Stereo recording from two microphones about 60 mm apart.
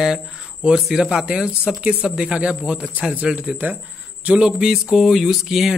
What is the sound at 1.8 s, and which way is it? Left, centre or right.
Speech, centre.